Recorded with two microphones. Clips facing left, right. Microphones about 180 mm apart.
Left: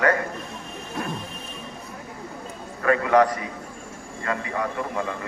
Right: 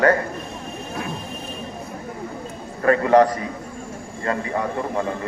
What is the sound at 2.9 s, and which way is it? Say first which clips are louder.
A man's voice: right 4 dB; 35° right (ahead or behind).